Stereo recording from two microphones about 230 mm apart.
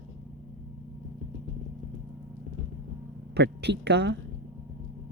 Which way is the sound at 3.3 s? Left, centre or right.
Right.